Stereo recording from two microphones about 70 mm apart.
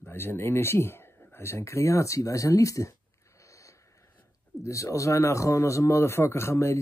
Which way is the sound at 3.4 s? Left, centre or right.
Left.